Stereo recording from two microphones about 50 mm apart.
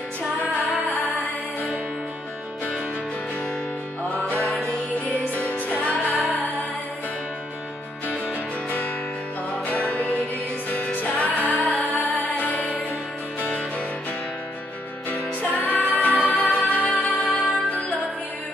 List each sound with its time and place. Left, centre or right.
0.4 s music: left
4.3 s music: left
8.6 s music: left
15.0 s music: left